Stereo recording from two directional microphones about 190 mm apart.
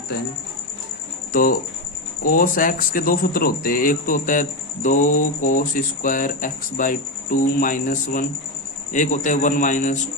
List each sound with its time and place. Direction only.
1.3 s a man's voice: 45° left (ahead or behind)